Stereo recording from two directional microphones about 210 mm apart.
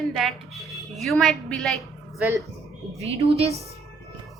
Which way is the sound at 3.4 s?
30° right (ahead or behind).